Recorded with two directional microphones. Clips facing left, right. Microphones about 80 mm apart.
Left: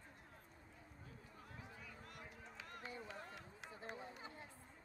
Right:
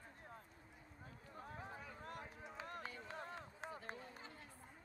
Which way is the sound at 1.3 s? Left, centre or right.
Right.